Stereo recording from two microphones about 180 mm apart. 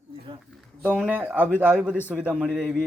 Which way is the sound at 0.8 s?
5° right (ahead or behind).